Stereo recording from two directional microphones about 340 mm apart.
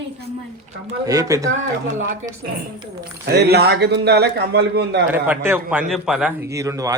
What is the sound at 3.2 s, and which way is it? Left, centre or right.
A man's voice, right.